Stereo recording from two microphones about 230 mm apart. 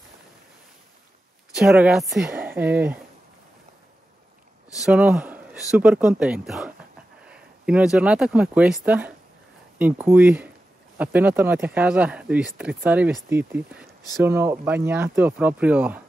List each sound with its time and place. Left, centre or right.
1.5 s speech: centre
4.8 s speech: centre